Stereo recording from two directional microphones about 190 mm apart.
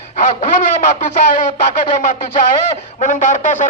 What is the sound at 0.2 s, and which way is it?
Speech, 45° left (ahead or behind).